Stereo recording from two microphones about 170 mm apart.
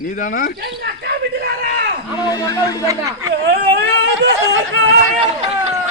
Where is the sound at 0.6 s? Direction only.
70° right (ahead or behind).